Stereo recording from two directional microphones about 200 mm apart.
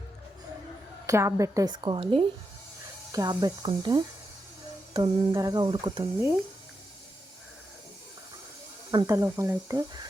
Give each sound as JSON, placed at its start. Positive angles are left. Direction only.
{"t": 1.0, "sound": "a woman's voice", "side_deg": -15}
{"t": 5.3, "sound": "a woman's voice", "side_deg": -20}
{"t": 8.9, "sound": "speech", "side_deg": -20}